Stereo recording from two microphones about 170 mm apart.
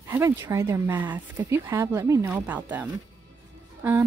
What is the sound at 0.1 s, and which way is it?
Speech, 15° right (ahead or behind).